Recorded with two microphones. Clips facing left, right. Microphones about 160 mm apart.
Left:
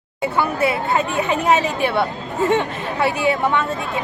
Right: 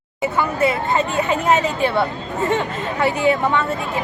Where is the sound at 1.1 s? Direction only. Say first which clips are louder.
Left 1 dB; 15° left (ahead or behind).